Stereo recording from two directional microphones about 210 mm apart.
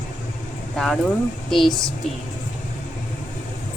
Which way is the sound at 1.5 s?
Centre (ahead or behind).